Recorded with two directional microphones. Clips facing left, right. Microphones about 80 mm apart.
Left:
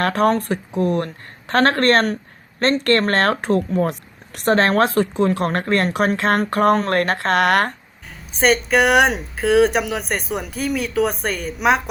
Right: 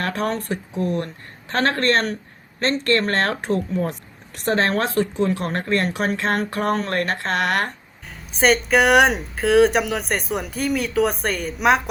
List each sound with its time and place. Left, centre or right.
0.0 s a woman's voice: left
8.1 s a sound: centre
8.7 s speech: centre